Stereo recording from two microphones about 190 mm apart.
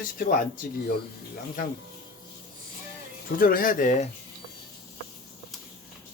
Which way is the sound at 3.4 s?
50° left (ahead or behind).